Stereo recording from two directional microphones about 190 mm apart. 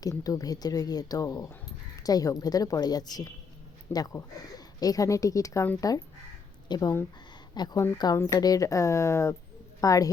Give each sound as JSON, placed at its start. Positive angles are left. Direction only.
{"t": 0.0, "sound": "a woman's voice", "side_deg": 20}